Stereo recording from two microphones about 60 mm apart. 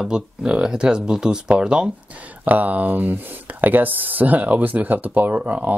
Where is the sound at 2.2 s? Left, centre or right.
Right.